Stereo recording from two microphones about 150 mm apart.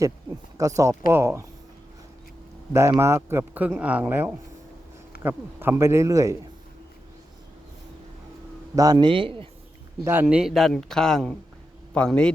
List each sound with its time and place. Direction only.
0.5 s speech: 20° right (ahead or behind)
3.0 s speech: 15° right (ahead or behind)
5.1 s a sound: 90° left
5.5 s speech: 15° right (ahead or behind)
8.7 s a man's voice: 25° right (ahead or behind)
10.0 s speech: 15° right (ahead or behind)
10.2 s a man's voice: 5° right (ahead or behind)